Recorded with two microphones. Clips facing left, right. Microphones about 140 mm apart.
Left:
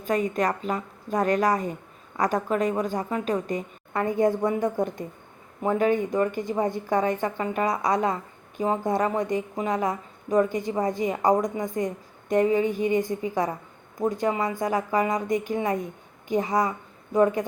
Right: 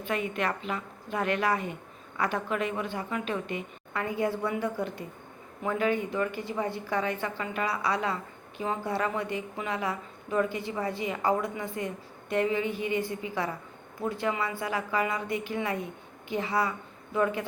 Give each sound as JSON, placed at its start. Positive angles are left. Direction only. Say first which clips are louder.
{"t": 0.0, "sound": "a woman's voice", "louder": "left 6 dB", "side_deg": 40}